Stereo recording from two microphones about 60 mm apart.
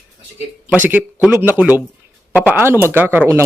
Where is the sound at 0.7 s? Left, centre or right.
Right.